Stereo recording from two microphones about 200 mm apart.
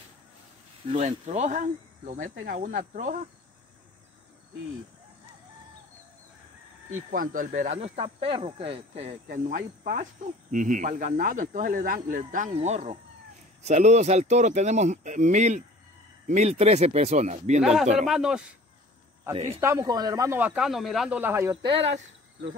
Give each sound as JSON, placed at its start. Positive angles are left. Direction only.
{"t": 0.8, "sound": "speech", "side_deg": -35}
{"t": 7.1, "sound": "speech", "side_deg": -40}
{"t": 9.5, "sound": "speech", "side_deg": -45}
{"t": 17.6, "sound": "speech", "side_deg": 0}
{"t": 19.6, "sound": "speech", "side_deg": -15}
{"t": 21.6, "sound": "speech", "side_deg": -30}
{"t": 21.9, "sound": "speech", "side_deg": -60}